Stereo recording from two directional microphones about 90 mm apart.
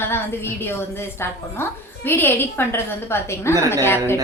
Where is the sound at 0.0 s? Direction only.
25° left (ahead or behind).